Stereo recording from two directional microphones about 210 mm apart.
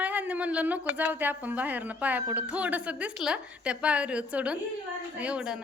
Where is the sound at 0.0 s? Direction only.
5° right (ahead or behind).